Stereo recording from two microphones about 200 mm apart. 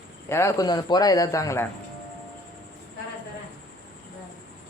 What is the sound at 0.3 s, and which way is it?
A man's voice, 15° left (ahead or behind).